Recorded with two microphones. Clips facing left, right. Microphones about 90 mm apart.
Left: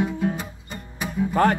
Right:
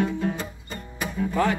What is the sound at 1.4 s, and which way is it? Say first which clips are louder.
Speech: left 4 dB; 50° left (ahead or behind).